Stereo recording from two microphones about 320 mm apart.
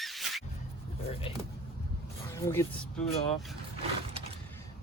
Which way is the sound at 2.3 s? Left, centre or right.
Centre.